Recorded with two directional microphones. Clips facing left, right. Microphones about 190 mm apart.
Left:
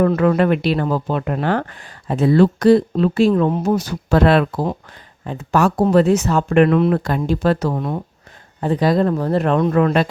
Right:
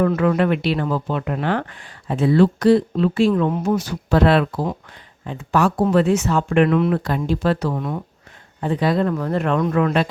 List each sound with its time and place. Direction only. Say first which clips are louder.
0.0 s speech: left 2 dB; 40° left (ahead or behind)